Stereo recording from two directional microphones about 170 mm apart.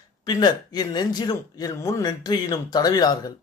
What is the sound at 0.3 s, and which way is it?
A man's voice, 25° left (ahead or behind).